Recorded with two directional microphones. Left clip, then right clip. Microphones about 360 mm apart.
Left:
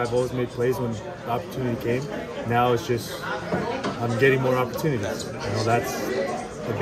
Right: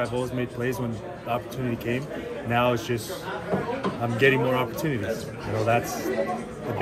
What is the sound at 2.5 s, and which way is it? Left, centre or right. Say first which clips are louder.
Speech: left 2 dB; centre.